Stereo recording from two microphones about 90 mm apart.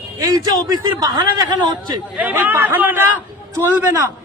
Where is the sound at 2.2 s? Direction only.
20° right (ahead or behind).